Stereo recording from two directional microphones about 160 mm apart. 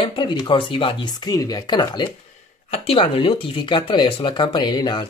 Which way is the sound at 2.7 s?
40° left (ahead or behind).